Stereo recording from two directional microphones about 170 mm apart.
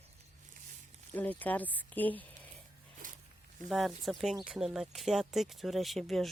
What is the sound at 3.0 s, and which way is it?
Zipper, 50° right (ahead or behind).